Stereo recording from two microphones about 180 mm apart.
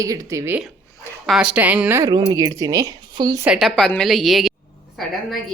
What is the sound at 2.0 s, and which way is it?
A woman's voice, 20° right (ahead or behind).